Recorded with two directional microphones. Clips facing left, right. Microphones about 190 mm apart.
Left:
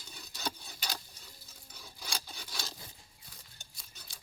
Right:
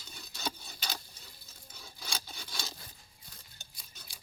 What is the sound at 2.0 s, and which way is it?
Wood, centre (ahead or behind).